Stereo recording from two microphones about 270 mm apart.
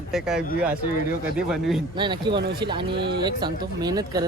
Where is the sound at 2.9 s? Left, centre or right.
Right.